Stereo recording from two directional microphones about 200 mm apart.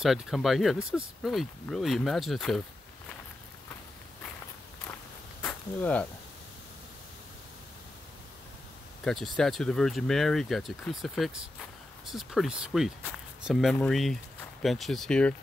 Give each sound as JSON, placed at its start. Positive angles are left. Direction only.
{"t": 0.0, "sound": "speech", "side_deg": 0}
{"t": 5.4, "sound": "a sound", "side_deg": 5}
{"t": 9.0, "sound": "speech", "side_deg": 0}